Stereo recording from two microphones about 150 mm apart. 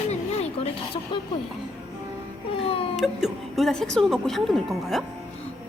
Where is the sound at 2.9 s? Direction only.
Centre (ahead or behind).